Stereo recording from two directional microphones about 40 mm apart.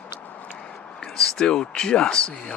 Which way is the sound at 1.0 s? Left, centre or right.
Left.